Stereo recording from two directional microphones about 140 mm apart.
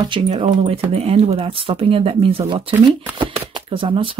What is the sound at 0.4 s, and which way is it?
Speech, 45° right (ahead or behind).